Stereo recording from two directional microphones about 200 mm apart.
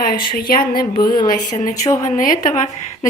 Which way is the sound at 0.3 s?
50° left (ahead or behind).